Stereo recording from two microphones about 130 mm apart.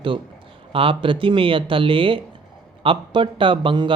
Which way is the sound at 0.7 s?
40° right (ahead or behind).